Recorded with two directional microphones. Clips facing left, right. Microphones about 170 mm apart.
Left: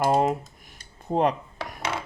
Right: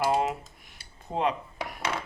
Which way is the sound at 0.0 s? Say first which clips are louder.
Left 4 dB; 45° left (ahead or behind).